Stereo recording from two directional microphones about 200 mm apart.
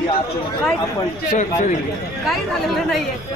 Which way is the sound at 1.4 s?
40° left (ahead or behind).